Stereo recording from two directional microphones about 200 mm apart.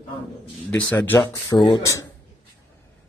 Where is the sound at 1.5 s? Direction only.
25° left (ahead or behind).